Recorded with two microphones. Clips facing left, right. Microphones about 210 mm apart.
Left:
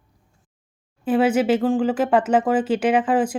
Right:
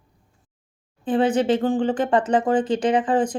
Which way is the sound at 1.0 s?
5° left (ahead or behind).